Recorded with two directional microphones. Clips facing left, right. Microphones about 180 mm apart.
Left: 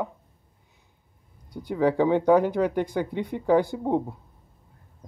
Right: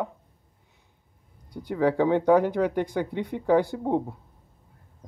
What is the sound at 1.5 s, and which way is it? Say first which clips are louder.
Speech: left 1 dB; 15° left (ahead or behind).